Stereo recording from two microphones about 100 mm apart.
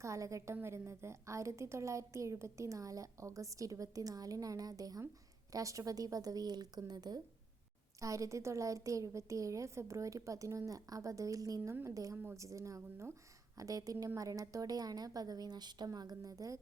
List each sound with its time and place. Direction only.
0.0 s a woman's voice: 30° right (ahead or behind)